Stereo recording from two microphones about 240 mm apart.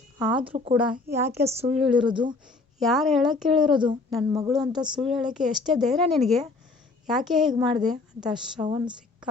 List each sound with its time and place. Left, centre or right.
0.3 s speech: right
0.7 s a woman's voice: centre
1.5 s speech: right
1.7 s a woman's voice: centre
2.0 s speech: centre
2.7 s a woman's voice: centre
4.3 s a woman's voice: centre
4.9 s a woman's voice: centre
8.6 s a woman's voice: centre